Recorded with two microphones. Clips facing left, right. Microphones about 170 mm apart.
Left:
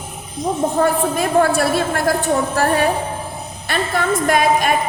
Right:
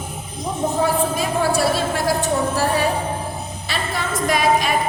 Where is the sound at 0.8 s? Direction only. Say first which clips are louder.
Left 2 dB; 55° left (ahead or behind).